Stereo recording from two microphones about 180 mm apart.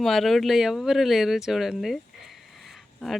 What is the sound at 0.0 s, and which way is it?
Speech, centre (ahead or behind).